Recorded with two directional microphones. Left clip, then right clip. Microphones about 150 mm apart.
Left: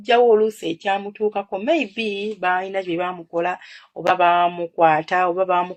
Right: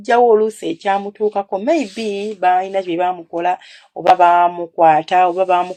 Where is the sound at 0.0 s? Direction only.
35° right (ahead or behind).